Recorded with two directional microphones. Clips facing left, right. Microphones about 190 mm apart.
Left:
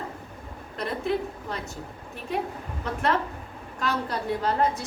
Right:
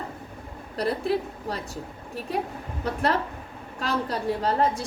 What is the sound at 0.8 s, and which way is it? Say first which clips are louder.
Speech: right 2 dB; 35° right (ahead or behind).